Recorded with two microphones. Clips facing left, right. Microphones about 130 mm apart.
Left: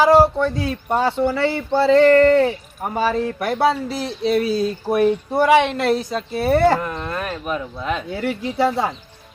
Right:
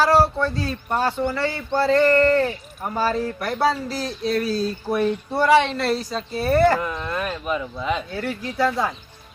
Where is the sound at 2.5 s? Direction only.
20° left (ahead or behind).